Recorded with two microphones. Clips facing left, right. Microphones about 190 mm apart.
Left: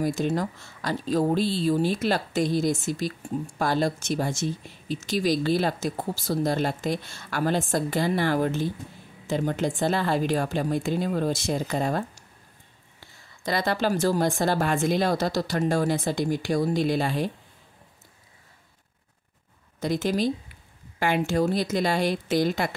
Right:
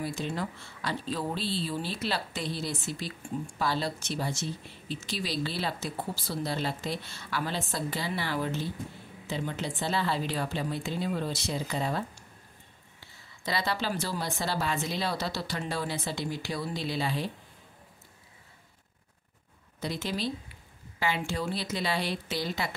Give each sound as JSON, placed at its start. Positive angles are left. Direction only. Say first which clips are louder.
{"t": 0.0, "sound": "speech", "louder": "left 8 dB", "side_deg": 45}
{"t": 13.4, "sound": "speech", "louder": "left 6 dB", "side_deg": 50}
{"t": 19.8, "sound": "speech", "louder": "left 8 dB", "side_deg": 45}